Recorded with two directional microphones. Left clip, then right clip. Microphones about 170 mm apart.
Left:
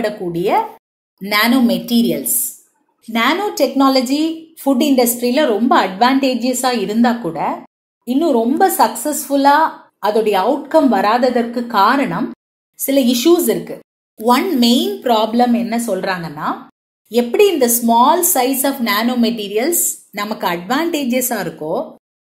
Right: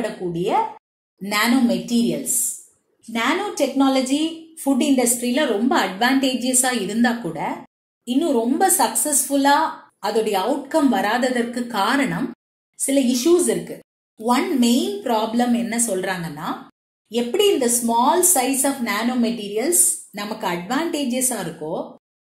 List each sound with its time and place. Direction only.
0.0 s a woman's voice: 25° left (ahead or behind)